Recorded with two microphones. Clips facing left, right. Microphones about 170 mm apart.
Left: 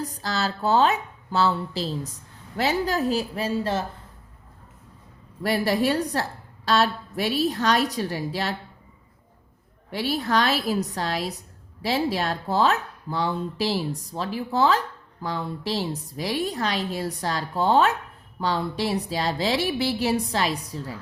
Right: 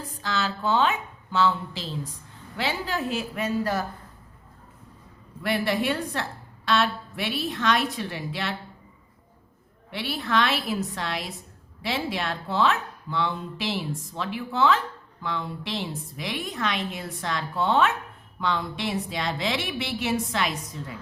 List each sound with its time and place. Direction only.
0.0 s a woman's voice: 40° left (ahead or behind)
5.4 s a woman's voice: 35° left (ahead or behind)
9.9 s a woman's voice: 40° left (ahead or behind)